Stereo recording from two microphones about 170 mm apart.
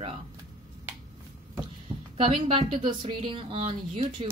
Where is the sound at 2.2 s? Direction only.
35° right (ahead or behind).